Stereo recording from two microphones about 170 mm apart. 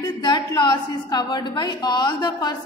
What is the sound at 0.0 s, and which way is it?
A woman's voice, 25° left (ahead or behind).